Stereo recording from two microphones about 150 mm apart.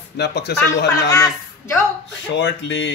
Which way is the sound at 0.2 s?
90° left.